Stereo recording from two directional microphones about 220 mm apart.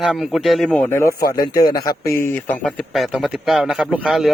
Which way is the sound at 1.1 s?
45° left (ahead or behind).